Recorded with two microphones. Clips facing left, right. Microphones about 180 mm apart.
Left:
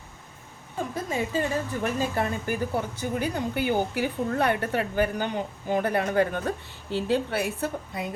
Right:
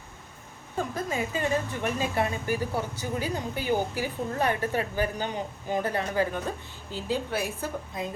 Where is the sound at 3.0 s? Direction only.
60° left (ahead or behind).